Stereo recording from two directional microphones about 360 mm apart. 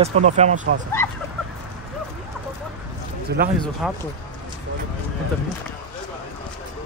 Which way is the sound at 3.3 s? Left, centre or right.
Right.